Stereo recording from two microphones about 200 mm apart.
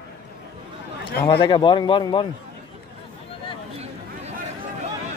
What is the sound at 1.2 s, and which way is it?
A man's voice, 25° left (ahead or behind).